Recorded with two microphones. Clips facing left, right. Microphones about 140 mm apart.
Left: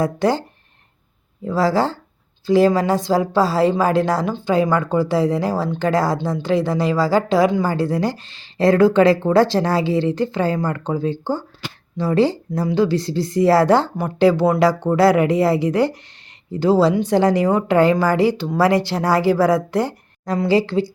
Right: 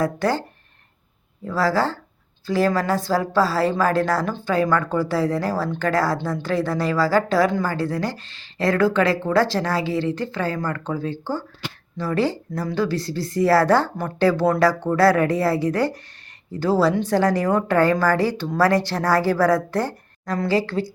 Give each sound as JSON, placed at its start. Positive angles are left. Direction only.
{"t": 0.0, "sound": "speech", "side_deg": 20}
{"t": 1.5, "sound": "a woman's voice", "side_deg": 20}